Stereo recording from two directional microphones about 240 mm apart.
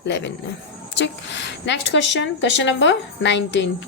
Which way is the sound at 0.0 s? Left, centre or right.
Left.